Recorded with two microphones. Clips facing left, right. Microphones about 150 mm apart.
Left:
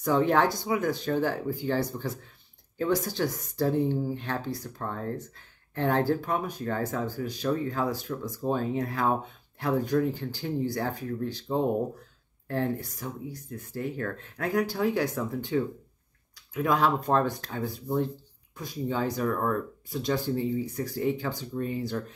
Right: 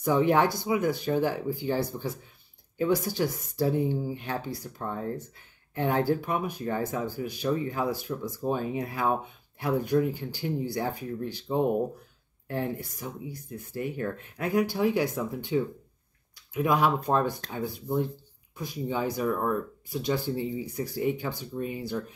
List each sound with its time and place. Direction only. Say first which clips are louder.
0.0 s speech: even; 15° right (ahead or behind)
18.9 s speech: even; 10° right (ahead or behind)